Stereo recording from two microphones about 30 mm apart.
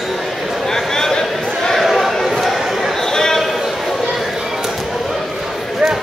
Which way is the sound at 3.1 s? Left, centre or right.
Centre.